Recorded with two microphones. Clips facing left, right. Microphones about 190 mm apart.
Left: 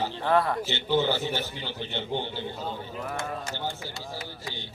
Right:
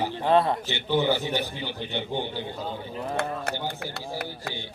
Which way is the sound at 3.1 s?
60° right (ahead or behind).